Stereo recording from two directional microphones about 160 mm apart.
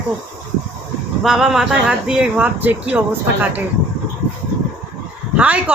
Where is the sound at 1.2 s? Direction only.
5° right (ahead or behind).